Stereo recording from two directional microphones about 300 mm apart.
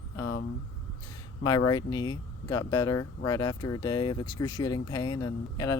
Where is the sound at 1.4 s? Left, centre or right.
Centre.